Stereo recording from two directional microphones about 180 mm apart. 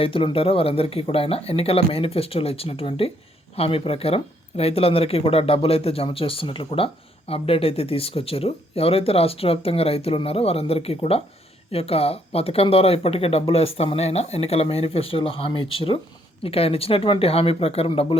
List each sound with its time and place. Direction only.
0.0 s speech: 30° left (ahead or behind)